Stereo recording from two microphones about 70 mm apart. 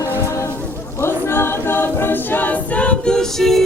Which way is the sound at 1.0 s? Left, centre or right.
Left.